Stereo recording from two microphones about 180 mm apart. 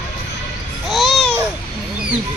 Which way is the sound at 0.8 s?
Centre (ahead or behind).